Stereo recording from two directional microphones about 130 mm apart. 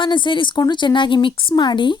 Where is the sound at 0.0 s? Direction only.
40° left (ahead or behind).